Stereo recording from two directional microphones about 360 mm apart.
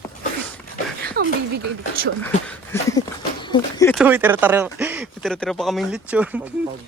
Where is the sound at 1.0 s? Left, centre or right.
Right.